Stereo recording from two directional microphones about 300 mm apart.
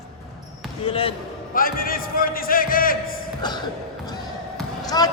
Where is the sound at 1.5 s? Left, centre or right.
Left.